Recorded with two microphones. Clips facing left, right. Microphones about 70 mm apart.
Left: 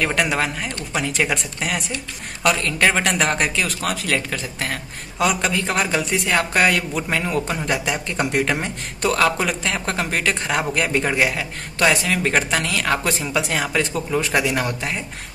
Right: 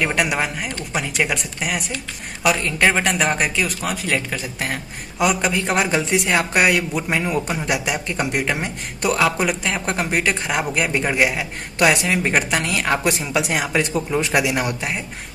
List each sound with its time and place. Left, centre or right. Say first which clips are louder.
0.0 s speech: even; centre
11.9 s speech: right 1 dB; right